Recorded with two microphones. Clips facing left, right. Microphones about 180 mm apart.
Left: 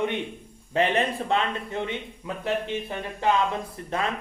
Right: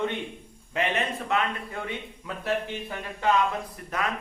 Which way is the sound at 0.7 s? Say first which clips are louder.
Left 4 dB; 30° left (ahead or behind).